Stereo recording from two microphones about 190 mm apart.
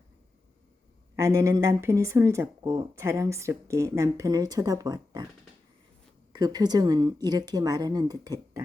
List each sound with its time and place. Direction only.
1.1 s speech: 15° right (ahead or behind)
6.3 s a woman's voice: 20° right (ahead or behind)